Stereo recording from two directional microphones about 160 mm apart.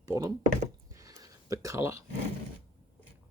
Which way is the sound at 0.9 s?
20° right (ahead or behind).